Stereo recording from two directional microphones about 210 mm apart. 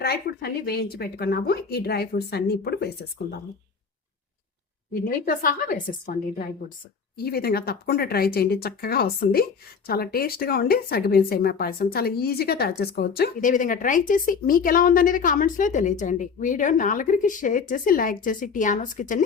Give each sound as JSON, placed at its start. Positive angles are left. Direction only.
{"t": 0.0, "sound": "speech", "side_deg": 50}
{"t": 4.9, "sound": "speech", "side_deg": 45}
{"t": 7.2, "sound": "speech", "side_deg": 45}